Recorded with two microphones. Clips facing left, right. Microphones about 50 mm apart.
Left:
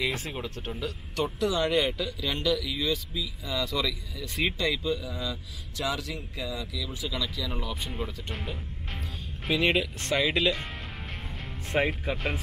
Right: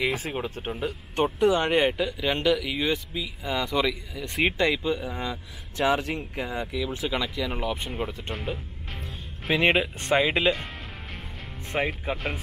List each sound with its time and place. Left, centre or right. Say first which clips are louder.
0.2 s speech: right 4 dB; right
2.0 s speech: right 4 dB; right
7.2 s speech: right 5 dB; right
9.5 s speech: right 3 dB; right
11.7 s speech: left 1 dB; centre